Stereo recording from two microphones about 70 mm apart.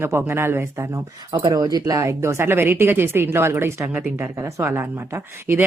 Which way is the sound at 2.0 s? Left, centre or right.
Right.